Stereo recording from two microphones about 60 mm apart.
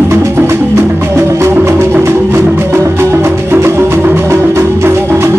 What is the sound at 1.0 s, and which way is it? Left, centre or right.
Music, right.